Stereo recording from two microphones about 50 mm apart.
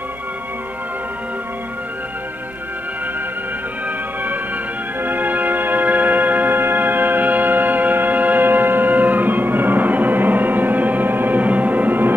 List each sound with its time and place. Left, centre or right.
5.0 s music: right